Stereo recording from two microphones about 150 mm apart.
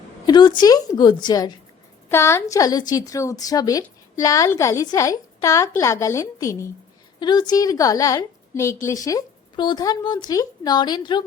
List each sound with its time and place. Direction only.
0.3 s a woman's voice: 30° left (ahead or behind)
2.0 s a woman's voice: 15° left (ahead or behind)